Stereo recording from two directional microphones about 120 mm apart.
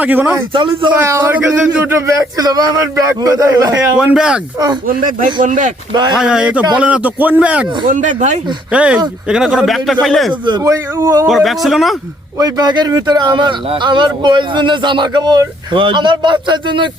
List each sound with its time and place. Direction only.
0.0 s a man's voice: 15° right (ahead or behind)
0.5 s a man's voice: 45° right (ahead or behind)
0.9 s a man's voice: 20° right (ahead or behind)
3.9 s a man's voice: 5° right (ahead or behind)
5.2 s speech: 90° right
5.9 s speech: 35° right (ahead or behind)
6.1 s a man's voice: 5° right (ahead or behind)
7.9 s speech: 90° right
8.7 s a man's voice: 10° right (ahead or behind)
10.6 s a man's voice: 25° right (ahead or behind)
11.3 s a man's voice: centre (ahead or behind)
12.4 s speech: 35° right (ahead or behind)